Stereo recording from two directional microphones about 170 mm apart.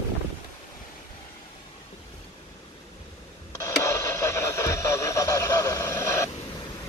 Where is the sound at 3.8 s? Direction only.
15° left (ahead or behind).